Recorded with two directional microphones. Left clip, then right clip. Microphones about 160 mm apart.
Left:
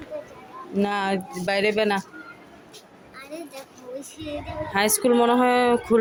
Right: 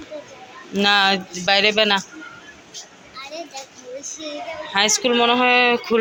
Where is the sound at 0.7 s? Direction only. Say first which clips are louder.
Right 8 dB; 15° left (ahead or behind).